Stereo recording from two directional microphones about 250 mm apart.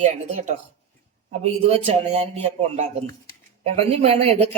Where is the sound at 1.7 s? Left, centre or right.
Right.